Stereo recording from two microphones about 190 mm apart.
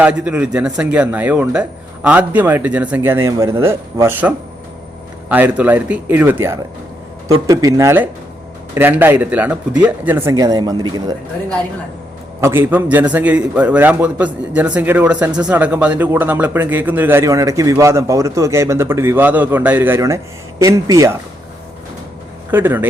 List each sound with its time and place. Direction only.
0.0 s speech: 5° right (ahead or behind)
22.5 s speech: 10° right (ahead or behind)